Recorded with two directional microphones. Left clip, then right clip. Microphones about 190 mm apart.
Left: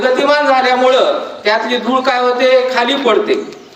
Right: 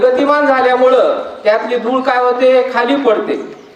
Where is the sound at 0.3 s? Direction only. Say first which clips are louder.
Even; 15° right (ahead or behind).